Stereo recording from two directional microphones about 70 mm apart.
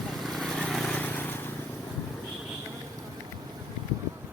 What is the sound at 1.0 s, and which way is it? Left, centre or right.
Vehicle, left.